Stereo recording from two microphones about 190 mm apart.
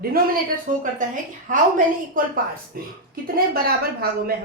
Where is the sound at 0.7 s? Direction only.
45° right (ahead or behind).